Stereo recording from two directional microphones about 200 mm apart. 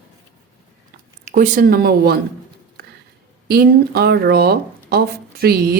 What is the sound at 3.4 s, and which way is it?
Speech, 50° right (ahead or behind).